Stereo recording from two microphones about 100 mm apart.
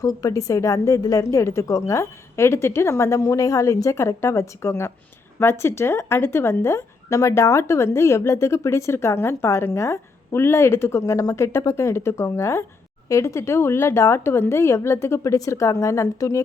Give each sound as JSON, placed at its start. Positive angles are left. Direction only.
{"t": 0.0, "sound": "a woman's voice", "side_deg": 35}